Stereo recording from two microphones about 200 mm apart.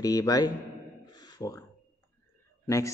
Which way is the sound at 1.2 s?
20° left (ahead or behind).